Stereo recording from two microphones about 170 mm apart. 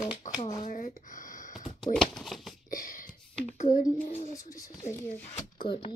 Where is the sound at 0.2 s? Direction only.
50° left (ahead or behind).